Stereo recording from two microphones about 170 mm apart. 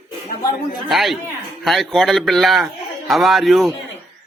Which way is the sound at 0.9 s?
Centre (ahead or behind).